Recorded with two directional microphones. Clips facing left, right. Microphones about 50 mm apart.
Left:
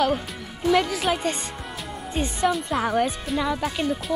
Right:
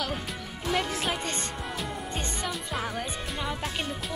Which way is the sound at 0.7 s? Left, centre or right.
Left.